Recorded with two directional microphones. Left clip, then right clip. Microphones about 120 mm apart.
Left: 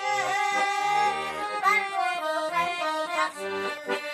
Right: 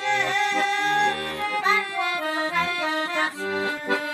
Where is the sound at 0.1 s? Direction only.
30° left (ahead or behind).